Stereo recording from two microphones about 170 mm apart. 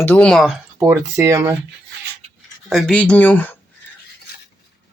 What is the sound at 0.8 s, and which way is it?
Speech, 20° right (ahead or behind).